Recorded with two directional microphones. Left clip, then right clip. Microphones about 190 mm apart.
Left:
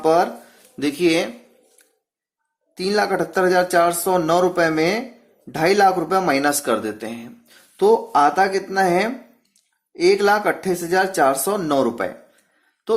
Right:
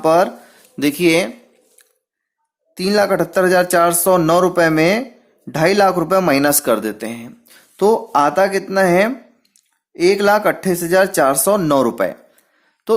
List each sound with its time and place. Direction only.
0.0 s speech: 35° right (ahead or behind)
2.7 s speech: 40° right (ahead or behind)